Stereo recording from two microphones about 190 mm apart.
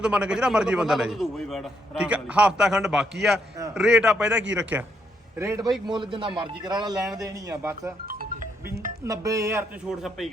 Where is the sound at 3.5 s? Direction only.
15° right (ahead or behind).